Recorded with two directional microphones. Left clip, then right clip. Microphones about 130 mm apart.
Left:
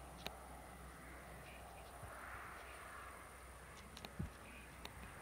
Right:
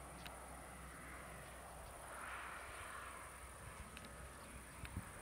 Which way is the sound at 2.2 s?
30° right (ahead or behind).